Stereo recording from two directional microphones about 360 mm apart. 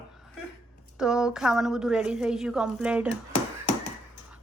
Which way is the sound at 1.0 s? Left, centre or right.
Centre.